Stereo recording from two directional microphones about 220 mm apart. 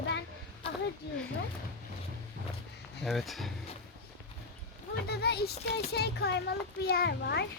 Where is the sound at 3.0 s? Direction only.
Centre (ahead or behind).